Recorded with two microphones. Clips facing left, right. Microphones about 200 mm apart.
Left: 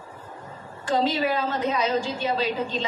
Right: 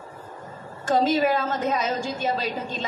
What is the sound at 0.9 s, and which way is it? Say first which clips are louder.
A woman's voice: right 3 dB; 45° right (ahead or behind).